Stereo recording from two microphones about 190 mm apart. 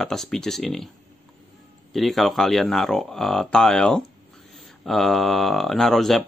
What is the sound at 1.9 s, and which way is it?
Speech, centre (ahead or behind).